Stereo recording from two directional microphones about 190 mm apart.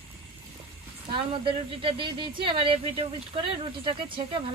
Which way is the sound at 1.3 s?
30° right (ahead or behind).